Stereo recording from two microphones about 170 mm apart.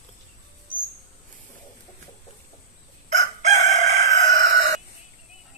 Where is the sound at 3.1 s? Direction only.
45° right (ahead or behind).